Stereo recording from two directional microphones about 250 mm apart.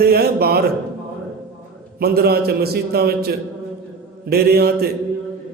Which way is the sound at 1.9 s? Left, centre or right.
Right.